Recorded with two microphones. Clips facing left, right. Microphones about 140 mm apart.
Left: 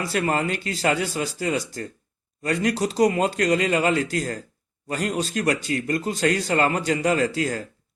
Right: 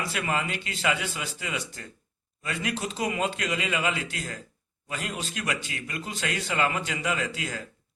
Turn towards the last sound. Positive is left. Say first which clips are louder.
# left 9 dB
turn(degrees=40)  # may be behind; listen again after turning